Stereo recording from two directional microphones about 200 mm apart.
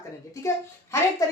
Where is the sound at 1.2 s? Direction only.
15° left (ahead or behind).